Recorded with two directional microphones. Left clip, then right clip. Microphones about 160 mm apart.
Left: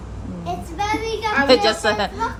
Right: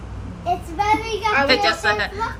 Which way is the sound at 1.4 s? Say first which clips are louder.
Left 2 dB; 20° left (ahead or behind).